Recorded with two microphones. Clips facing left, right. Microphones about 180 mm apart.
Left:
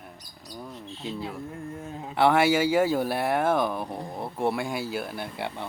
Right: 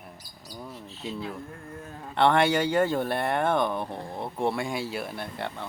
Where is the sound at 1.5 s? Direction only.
25° left (ahead or behind).